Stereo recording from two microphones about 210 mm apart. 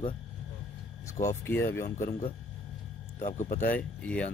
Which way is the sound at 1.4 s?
10° left (ahead or behind).